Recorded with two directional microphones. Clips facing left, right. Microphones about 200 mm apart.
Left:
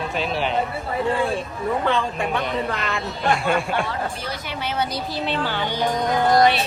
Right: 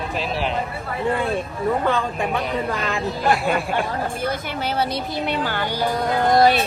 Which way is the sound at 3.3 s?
Centre (ahead or behind).